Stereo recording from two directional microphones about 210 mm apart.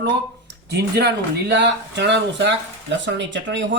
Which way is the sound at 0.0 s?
55° right (ahead or behind).